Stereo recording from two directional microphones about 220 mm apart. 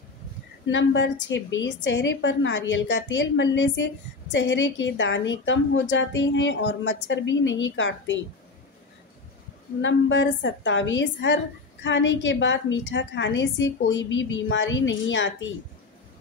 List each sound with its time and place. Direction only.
0.7 s a woman's voice: 55° left (ahead or behind)
9.8 s a woman's voice: 55° left (ahead or behind)